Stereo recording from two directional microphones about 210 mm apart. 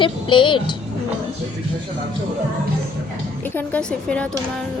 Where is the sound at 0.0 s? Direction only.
25° left (ahead or behind).